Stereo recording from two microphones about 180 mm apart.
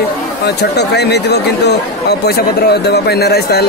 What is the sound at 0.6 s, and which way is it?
Speech, 70° left (ahead or behind).